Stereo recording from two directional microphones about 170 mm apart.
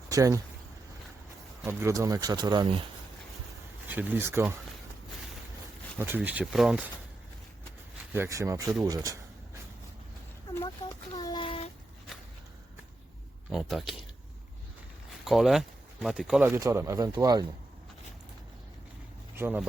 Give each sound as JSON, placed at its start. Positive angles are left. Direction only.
{"t": 0.1, "sound": "speech", "side_deg": -20}
{"t": 1.6, "sound": "speech", "side_deg": -15}
{"t": 3.8, "sound": "speech", "side_deg": -10}
{"t": 6.0, "sound": "speech", "side_deg": -10}
{"t": 8.1, "sound": "speech", "side_deg": -15}
{"t": 11.1, "sound": "child singing", "side_deg": 25}
{"t": 13.5, "sound": "speech", "side_deg": 0}
{"t": 15.2, "sound": "speech", "side_deg": 0}
{"t": 16.5, "sound": "speech", "side_deg": -15}
{"t": 19.4, "sound": "speech", "side_deg": -10}